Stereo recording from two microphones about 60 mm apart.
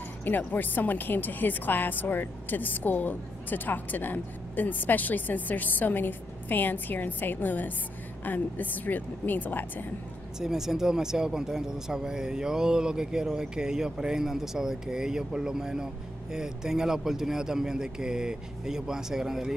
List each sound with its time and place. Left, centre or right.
0.2 s speech: left
10.4 s speech: centre